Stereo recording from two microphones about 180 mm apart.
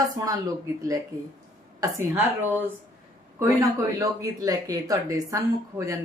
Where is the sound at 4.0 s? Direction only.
20° right (ahead or behind).